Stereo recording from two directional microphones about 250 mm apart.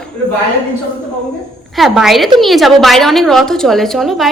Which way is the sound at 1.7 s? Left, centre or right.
Centre.